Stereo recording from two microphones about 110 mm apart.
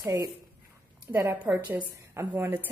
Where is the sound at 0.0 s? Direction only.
30° right (ahead or behind).